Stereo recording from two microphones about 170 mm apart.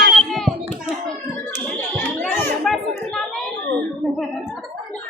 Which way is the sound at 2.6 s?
Centre (ahead or behind).